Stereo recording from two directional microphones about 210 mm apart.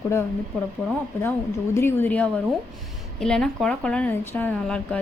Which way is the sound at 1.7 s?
10° left (ahead or behind).